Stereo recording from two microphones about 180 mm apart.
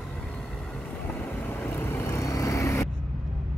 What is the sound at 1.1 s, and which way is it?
Vehicle, 10° left (ahead or behind).